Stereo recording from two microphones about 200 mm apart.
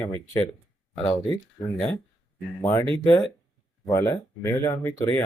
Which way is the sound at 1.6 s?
25° left (ahead or behind).